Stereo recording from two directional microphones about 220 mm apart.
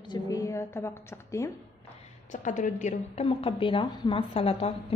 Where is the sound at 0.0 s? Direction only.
15° left (ahead or behind).